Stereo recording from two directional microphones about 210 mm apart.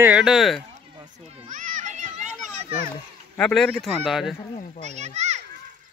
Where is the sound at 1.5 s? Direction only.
35° right (ahead or behind).